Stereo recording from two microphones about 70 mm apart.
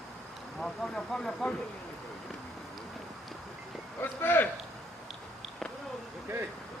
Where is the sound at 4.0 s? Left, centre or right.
Left.